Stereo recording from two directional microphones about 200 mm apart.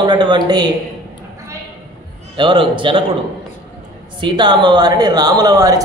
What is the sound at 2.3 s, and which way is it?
Speech, 25° right (ahead or behind).